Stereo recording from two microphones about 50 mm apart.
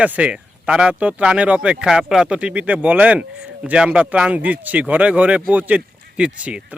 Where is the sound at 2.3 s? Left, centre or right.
Right.